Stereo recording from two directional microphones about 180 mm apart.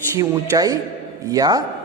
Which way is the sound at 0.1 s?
15° right (ahead or behind).